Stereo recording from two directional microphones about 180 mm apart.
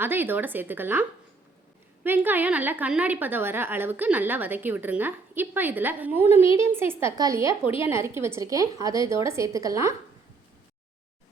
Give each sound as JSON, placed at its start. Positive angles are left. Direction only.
{"t": 0.0, "sound": "a woman's voice", "side_deg": -10}
{"t": 2.0, "sound": "a woman's voice", "side_deg": -10}